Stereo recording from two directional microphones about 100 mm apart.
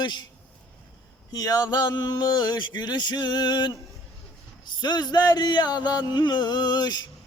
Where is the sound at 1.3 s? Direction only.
40° left (ahead or behind).